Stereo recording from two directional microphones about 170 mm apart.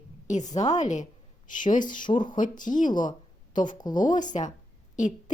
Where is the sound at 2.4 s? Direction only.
50° left (ahead or behind).